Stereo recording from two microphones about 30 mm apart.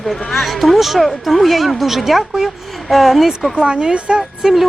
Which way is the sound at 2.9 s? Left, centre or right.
Centre.